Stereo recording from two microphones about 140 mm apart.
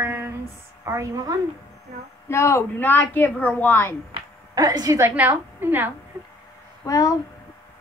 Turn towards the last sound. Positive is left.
turn(degrees=25)  # may be behind; listen again after turning